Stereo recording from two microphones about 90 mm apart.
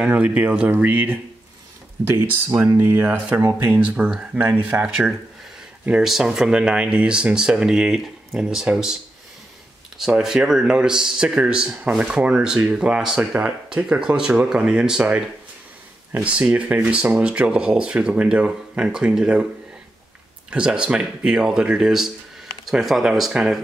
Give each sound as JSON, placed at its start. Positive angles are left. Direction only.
{"t": 0.0, "sound": "speech", "side_deg": -15}
{"t": 2.0, "sound": "speech", "side_deg": -30}
{"t": 3.7, "sound": "speech", "side_deg": -15}
{"t": 5.9, "sound": "speech", "side_deg": -5}
{"t": 20.4, "sound": "speech", "side_deg": -10}